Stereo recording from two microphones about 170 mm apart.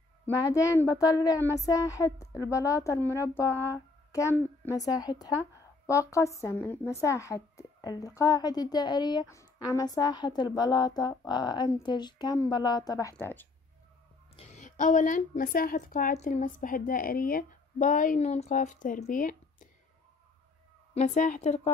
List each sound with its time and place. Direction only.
0.6 s a woman's voice: 20° left (ahead or behind)
14.3 s a woman's voice: 40° left (ahead or behind)
20.9 s a woman's voice: 45° left (ahead or behind)